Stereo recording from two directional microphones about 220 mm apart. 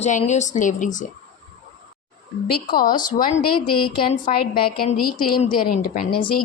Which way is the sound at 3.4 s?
90° left.